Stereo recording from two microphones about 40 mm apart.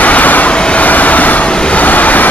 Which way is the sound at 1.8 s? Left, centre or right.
Left.